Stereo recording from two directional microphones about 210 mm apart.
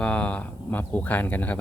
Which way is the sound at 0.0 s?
5° left (ahead or behind).